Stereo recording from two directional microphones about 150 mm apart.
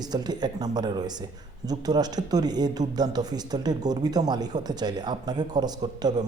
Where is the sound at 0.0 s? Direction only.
25° right (ahead or behind).